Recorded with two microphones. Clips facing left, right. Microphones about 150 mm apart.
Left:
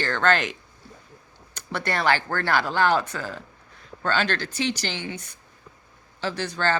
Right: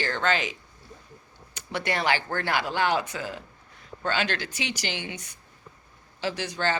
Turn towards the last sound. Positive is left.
turn(degrees=-10)  # may be behind; listen again after turning